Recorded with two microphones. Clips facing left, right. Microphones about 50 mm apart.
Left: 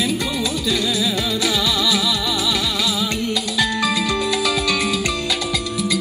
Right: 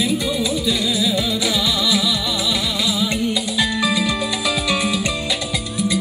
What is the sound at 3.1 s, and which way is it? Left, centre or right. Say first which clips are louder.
Music: right 1 dB; right.